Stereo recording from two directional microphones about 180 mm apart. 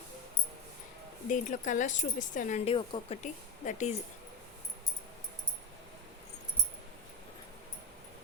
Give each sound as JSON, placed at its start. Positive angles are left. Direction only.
{"t": 1.3, "sound": "speech", "side_deg": 45}
{"t": 2.6, "sound": "speech", "side_deg": 30}
{"t": 3.2, "sound": "speech", "side_deg": 45}